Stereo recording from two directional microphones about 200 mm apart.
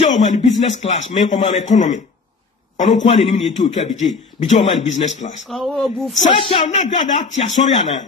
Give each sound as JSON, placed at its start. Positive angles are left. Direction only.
{"t": 0.0, "sound": "speech", "side_deg": 35}
{"t": 3.1, "sound": "speech", "side_deg": 30}
{"t": 5.5, "sound": "speech", "side_deg": 0}
{"t": 6.3, "sound": "speech", "side_deg": 25}